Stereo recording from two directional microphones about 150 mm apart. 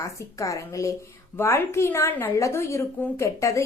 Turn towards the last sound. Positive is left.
turn(degrees=20)  # may be behind; listen again after turning